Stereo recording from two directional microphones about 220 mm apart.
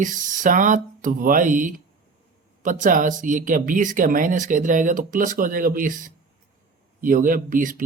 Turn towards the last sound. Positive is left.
turn(degrees=-40)  # may be behind; listen again after turning